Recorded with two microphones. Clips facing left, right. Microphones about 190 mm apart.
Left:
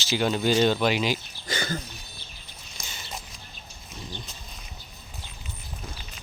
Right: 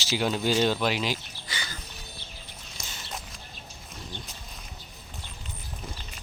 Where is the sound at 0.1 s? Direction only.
Centre (ahead or behind).